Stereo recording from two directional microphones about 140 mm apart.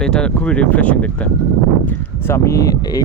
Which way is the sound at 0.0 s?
5° left (ahead or behind).